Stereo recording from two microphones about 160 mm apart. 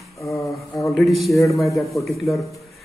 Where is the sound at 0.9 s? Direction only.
Centre (ahead or behind).